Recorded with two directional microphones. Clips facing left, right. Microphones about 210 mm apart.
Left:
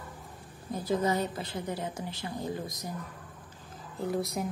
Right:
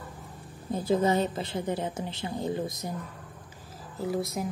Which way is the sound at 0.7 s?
25° right (ahead or behind).